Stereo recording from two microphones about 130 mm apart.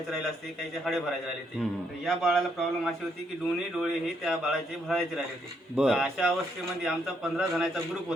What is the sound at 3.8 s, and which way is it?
A man's voice, 5° right (ahead or behind).